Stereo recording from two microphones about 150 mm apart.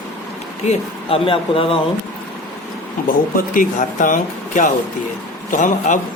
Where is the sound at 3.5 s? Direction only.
60° left (ahead or behind).